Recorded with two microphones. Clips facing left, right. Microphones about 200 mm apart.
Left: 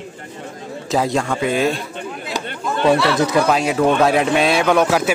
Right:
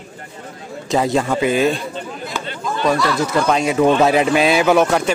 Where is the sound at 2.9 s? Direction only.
25° left (ahead or behind).